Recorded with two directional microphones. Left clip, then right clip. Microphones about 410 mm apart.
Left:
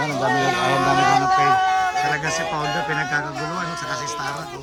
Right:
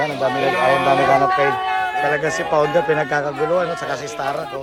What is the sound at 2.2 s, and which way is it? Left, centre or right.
A man's voice, centre.